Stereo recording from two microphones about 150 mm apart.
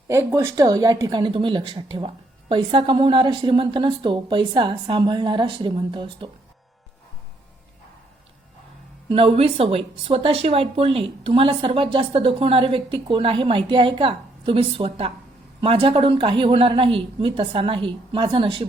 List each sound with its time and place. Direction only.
0.1 s a woman's voice: 20° right (ahead or behind); by 6.3 s 35° right (ahead or behind)
9.0 s a woman's voice: 40° right (ahead or behind)